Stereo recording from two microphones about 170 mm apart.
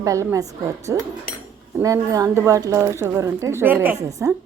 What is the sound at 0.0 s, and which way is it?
A woman's voice, 20° right (ahead or behind).